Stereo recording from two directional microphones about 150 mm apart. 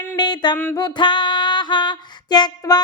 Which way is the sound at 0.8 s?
30° left (ahead or behind).